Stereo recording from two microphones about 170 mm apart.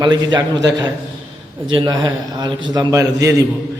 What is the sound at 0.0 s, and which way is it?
A man's voice, 25° right (ahead or behind).